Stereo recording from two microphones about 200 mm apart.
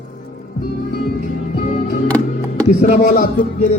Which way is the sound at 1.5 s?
40° left (ahead or behind).